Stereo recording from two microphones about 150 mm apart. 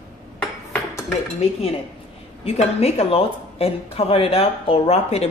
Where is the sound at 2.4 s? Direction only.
45° left (ahead or behind).